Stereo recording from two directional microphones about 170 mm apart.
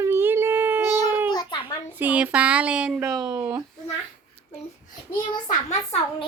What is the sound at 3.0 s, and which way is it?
Speech, 20° right (ahead or behind).